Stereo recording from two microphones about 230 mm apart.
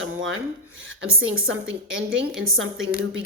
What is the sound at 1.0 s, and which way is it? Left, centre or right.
Speech, right.